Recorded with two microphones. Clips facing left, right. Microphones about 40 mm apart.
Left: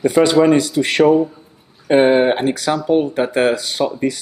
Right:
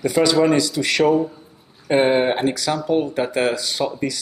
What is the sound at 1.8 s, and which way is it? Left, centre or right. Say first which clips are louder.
Speech: left 4 dB; centre.